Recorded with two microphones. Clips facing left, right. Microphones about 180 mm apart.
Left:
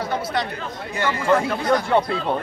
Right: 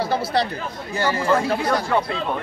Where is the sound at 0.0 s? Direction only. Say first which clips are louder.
Right 3 dB; 30° right (ahead or behind).